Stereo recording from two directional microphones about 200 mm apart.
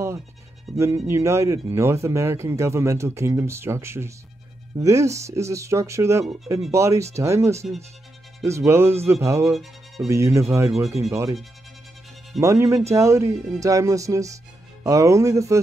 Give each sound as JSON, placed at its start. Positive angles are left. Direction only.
{"t": 0.7, "sound": "speech", "side_deg": -15}
{"t": 9.5, "sound": "speech", "side_deg": 0}
{"t": 10.0, "sound": "speech", "side_deg": -15}
{"t": 12.4, "sound": "speech", "side_deg": -15}